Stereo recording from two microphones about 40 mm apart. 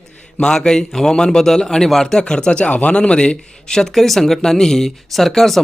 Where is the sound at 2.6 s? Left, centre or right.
Left; by 5.6 s centre.